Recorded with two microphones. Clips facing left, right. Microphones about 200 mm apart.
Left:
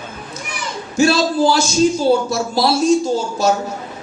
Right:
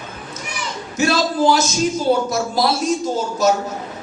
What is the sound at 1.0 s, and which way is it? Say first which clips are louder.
Speech: left 3 dB; 30° left (ahead or behind).